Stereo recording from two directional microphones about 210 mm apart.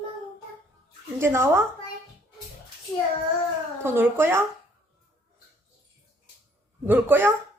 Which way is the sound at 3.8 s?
10° right (ahead or behind).